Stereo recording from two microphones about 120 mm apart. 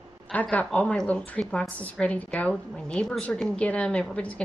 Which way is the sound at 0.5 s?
10° left (ahead or behind).